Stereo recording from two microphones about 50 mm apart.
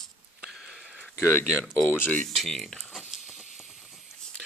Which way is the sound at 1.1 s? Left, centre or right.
Left.